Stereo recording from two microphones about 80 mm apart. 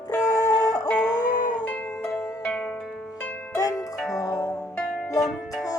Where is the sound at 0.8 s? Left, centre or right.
Centre.